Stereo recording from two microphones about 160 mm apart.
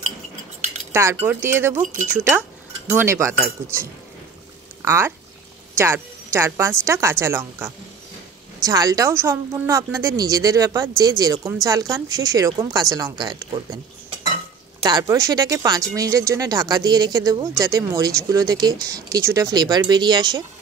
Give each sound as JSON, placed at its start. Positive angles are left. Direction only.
{"t": 0.9, "sound": "speech", "side_deg": -15}
{"t": 4.8, "sound": "a woman's voice", "side_deg": -15}
{"t": 14.8, "sound": "speech", "side_deg": -25}